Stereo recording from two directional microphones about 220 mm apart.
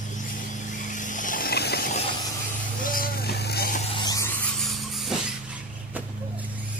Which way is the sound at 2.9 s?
40° left (ahead or behind).